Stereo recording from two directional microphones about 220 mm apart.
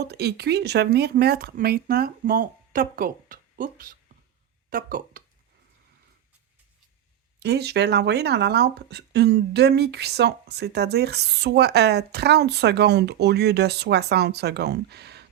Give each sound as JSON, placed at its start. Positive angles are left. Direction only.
{"t": 0.1, "sound": "speech", "side_deg": -45}
{"t": 7.3, "sound": "speech", "side_deg": -50}